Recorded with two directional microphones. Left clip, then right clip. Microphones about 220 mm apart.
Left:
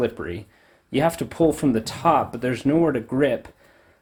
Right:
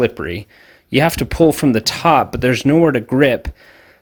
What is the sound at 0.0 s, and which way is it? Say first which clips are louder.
Speech: right 7 dB; 40° right (ahead or behind).